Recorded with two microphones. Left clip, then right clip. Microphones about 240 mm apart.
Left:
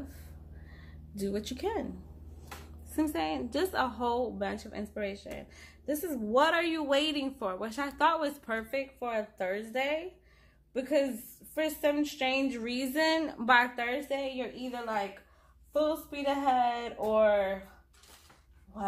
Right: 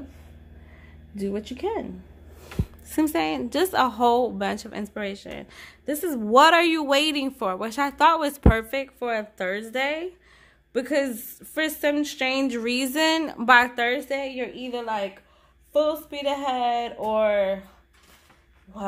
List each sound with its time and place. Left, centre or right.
1.1 s speech: right
3.0 s a woman's voice: right